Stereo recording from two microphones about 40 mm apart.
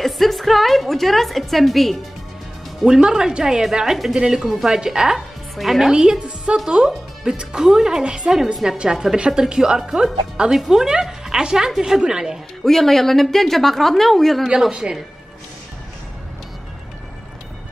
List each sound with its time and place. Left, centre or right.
0.0 s music: centre
2.8 s speech: centre
4.6 s speech: centre
5.6 s speech: centre
5.9 s a woman's voice: centre
8.9 s speech: centre
10.5 s speech: centre
12.6 s speech: centre
14.7 s speech: right